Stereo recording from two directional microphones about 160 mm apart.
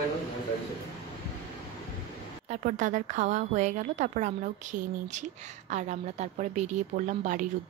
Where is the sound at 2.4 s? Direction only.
50° right (ahead or behind).